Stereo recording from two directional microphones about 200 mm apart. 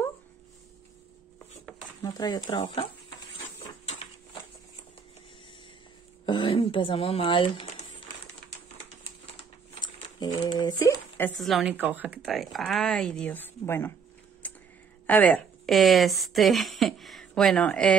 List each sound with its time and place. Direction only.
2.0 s speech: 20° left (ahead or behind)
3.5 s a sound: 30° left (ahead or behind)
6.2 s speech: 25° left (ahead or behind)
10.1 s speech: 20° left (ahead or behind)
14.4 s a sound: 10° left (ahead or behind)
15.0 s a woman's voice: 10° left (ahead or behind)